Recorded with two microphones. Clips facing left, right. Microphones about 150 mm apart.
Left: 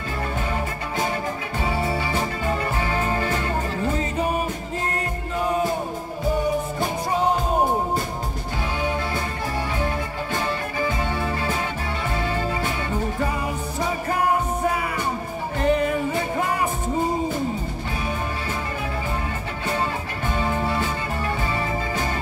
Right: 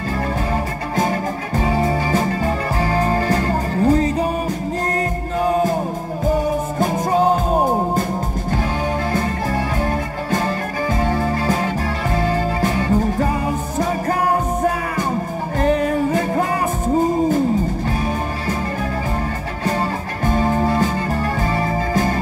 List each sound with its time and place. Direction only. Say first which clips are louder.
1.6 s music: right 6 dB; 40° right (ahead or behind)
6.8 s music: right 6 dB; 45° right (ahead or behind)
9.8 s music: right 4 dB; 45° right (ahead or behind)
15.6 s music: right 4 dB; 40° right (ahead or behind)
20.2 s music: right 7 dB; 40° right (ahead or behind)